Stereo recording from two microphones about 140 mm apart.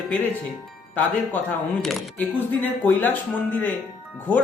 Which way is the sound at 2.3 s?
15° left (ahead or behind).